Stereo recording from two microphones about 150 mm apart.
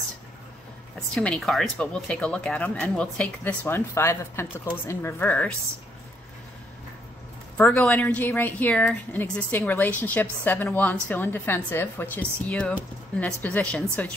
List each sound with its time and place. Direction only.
0.9 s speech: 5° left (ahead or behind)
7.5 s speech: 5° left (ahead or behind)